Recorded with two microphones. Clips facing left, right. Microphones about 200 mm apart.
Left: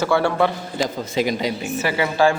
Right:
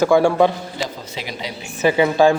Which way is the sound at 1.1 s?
50° left (ahead or behind).